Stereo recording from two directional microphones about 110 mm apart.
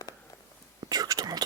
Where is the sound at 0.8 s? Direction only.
35° right (ahead or behind).